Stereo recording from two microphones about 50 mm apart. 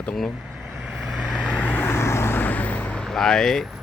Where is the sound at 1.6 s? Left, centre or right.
Left.